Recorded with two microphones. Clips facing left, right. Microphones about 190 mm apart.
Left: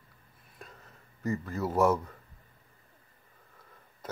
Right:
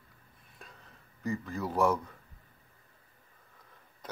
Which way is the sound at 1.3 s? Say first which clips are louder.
Left 2 dB; 5° left (ahead or behind).